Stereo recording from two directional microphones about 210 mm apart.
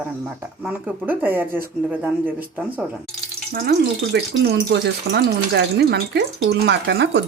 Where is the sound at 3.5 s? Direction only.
50° right (ahead or behind).